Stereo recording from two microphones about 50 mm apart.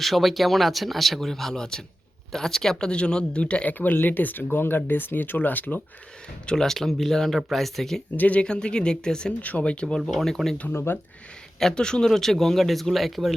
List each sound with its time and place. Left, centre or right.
0.0 s speech: centre; by 3.7 s left
3.7 s speech: left
6.4 s speech: centre
8.1 s speech: left
9.4 s speech: left
10.1 s speech: centre
10.7 s speech: left
11.6 s speech: centre